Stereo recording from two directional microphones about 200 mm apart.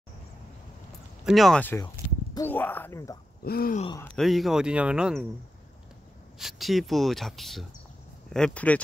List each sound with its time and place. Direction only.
1.2 s speech: centre (ahead or behind)
3.4 s groan: 50° left (ahead or behind)
4.2 s speech: centre (ahead or behind)
6.3 s speech: centre (ahead or behind)